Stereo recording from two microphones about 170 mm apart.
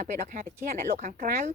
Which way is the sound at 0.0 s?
50° right (ahead or behind).